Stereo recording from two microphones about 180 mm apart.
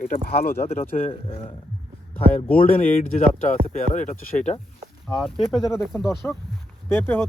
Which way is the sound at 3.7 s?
45° left (ahead or behind).